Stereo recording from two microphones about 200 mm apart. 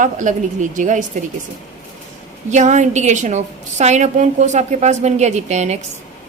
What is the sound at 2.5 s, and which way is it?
A woman's voice, 35° right (ahead or behind).